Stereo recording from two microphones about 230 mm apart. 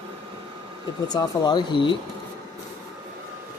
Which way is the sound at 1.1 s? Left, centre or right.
Centre.